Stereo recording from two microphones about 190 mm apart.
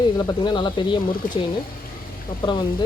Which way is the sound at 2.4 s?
25° left (ahead or behind).